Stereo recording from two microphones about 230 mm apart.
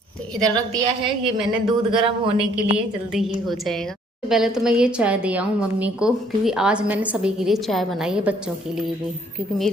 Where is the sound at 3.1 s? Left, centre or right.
Centre.